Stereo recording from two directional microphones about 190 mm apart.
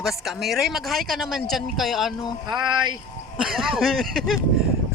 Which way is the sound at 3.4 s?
Centre (ahead or behind).